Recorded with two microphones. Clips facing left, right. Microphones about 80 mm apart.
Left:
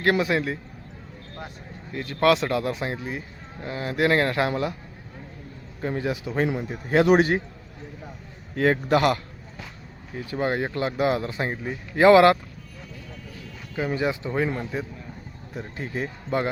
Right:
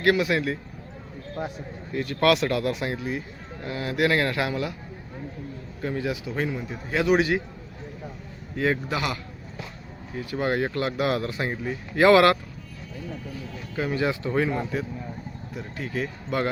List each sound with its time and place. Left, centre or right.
0.0 s speech: left
2.0 s speech: left
5.8 s speech: left
6.9 s a man's voice: left
8.5 s a man's voice: left
10.2 s speech: left
13.7 s speech: centre
15.5 s speech: left